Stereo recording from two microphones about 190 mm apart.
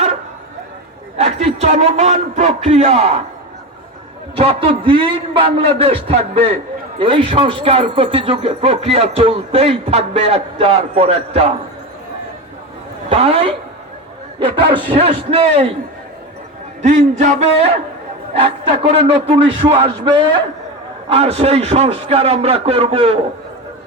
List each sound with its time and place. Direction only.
1.2 s speech: 35° right (ahead or behind)
4.4 s a man's voice: 30° right (ahead or behind)
13.1 s a man's voice: 30° right (ahead or behind)
16.8 s a man's voice: 40° right (ahead or behind)